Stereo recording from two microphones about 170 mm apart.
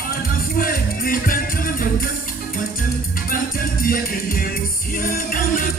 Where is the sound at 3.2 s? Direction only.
55° left (ahead or behind).